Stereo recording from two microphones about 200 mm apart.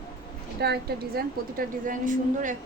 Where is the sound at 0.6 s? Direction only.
50° right (ahead or behind).